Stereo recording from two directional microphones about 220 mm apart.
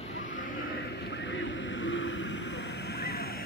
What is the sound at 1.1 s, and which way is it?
Vehicle, 55° left (ahead or behind).